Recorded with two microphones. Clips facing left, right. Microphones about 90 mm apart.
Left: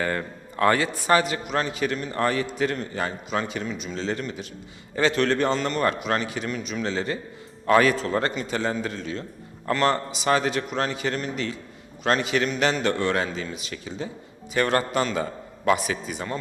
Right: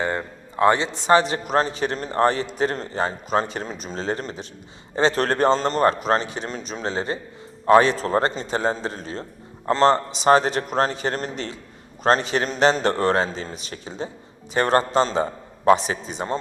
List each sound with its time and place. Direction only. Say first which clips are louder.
0.0 s a man's voice: right 2 dB; 20° right (ahead or behind)